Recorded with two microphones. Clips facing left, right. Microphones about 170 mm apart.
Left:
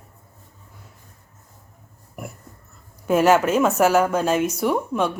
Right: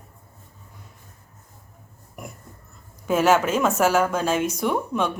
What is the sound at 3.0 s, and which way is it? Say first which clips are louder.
Speech: left 2 dB; 10° left (ahead or behind).